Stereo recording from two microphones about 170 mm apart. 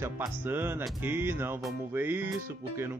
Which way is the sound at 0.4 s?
10° right (ahead or behind).